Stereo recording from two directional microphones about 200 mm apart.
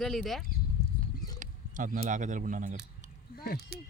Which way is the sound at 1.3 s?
40° right (ahead or behind).